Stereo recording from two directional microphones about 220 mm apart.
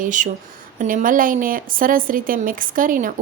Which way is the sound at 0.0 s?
35° right (ahead or behind).